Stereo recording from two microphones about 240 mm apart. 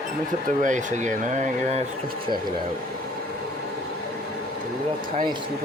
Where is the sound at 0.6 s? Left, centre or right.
Right.